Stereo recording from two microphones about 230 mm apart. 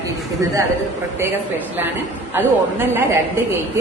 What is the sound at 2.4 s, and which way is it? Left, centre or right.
Speech, centre.